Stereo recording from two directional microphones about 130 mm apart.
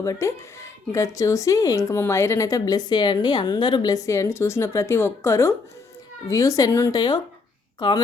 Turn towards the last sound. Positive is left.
turn(degrees=35)  # may be behind; listen again after turning